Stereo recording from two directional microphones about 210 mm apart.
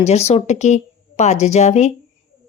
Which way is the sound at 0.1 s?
30° left (ahead or behind).